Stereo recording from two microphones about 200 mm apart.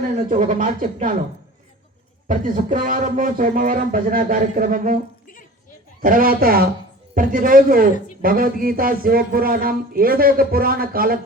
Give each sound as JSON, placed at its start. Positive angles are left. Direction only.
{"t": 0.3, "sound": "speech", "side_deg": -40}
{"t": 2.2, "sound": "a man's voice", "side_deg": -45}
{"t": 6.0, "sound": "a man's voice", "side_deg": -45}